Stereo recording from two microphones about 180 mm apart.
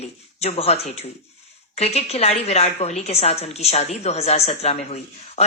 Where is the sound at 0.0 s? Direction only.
35° left (ahead or behind).